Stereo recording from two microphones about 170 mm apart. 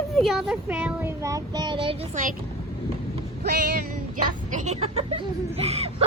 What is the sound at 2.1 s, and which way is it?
Speech, 50° right (ahead or behind).